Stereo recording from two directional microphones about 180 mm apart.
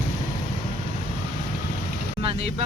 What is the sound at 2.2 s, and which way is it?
Speech, 35° right (ahead or behind).